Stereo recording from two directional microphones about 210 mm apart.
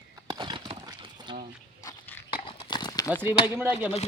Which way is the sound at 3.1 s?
10° right (ahead or behind).